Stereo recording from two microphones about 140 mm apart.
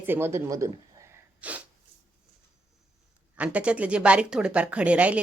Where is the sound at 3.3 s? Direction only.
10° right (ahead or behind).